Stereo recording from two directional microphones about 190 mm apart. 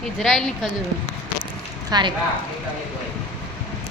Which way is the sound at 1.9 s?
20° right (ahead or behind).